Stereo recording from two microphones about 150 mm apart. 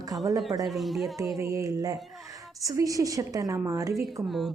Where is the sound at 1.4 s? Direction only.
20° right (ahead or behind).